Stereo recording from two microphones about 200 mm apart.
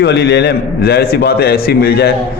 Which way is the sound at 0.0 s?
60° left (ahead or behind).